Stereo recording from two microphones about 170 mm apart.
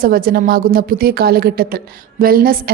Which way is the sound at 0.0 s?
60° right (ahead or behind).